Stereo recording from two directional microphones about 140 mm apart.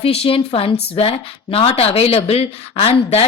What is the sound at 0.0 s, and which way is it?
A woman's voice, 45° left (ahead or behind).